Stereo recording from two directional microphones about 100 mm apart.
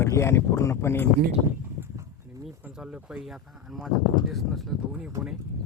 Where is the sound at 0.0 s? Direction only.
25° left (ahead or behind).